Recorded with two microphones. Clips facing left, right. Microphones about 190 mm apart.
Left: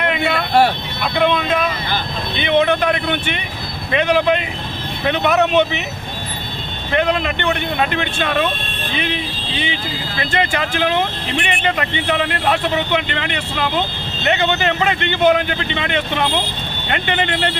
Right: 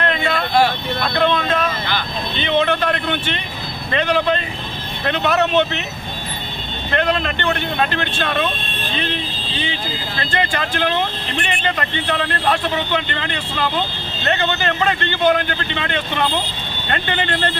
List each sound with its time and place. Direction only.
0.0 s vehicle: 10° left (ahead or behind)
1.0 s speech: 10° left (ahead or behind)
7.0 s speech: 10° left (ahead or behind)